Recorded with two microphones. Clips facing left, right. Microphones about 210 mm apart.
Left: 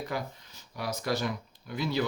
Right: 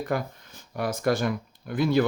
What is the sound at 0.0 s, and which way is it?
Speech, 50° right (ahead or behind).